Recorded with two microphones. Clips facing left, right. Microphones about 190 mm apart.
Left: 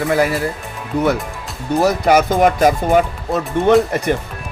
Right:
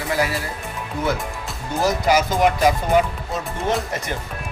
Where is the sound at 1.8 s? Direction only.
60° left (ahead or behind).